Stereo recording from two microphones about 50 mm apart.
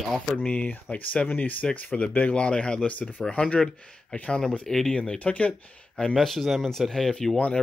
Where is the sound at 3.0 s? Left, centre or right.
Left.